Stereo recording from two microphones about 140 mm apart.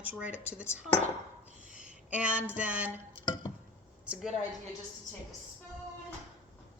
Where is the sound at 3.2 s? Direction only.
30° left (ahead or behind).